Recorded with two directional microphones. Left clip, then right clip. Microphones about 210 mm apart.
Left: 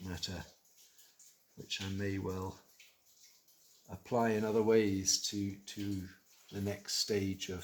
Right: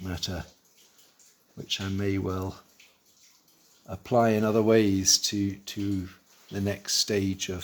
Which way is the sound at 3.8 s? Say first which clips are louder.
Right 10 dB; 50° right (ahead or behind).